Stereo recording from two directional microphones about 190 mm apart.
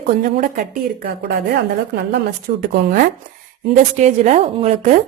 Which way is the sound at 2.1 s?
60° right (ahead or behind).